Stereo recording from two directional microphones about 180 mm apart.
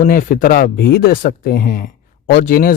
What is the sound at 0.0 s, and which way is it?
Speech, 50° left (ahead or behind).